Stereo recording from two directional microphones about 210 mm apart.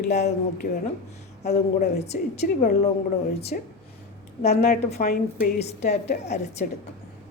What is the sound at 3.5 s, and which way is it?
A woman's voice, 40° left (ahead or behind).